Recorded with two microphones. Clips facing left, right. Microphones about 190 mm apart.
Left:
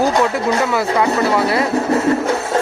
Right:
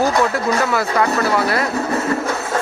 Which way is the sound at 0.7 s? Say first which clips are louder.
Left 2 dB; 20° left (ahead or behind).